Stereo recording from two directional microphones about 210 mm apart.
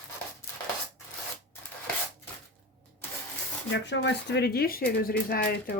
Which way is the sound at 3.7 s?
55° left (ahead or behind).